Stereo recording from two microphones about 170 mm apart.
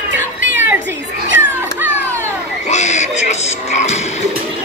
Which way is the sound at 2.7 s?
45° left (ahead or behind).